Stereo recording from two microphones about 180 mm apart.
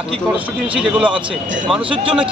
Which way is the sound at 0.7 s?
5° right (ahead or behind).